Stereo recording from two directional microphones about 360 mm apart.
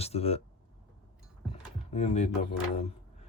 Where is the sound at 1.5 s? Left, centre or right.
Centre.